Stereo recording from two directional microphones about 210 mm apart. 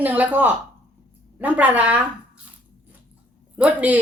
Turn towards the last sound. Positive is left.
turn(degrees=-5)  # may be behind; listen again after turning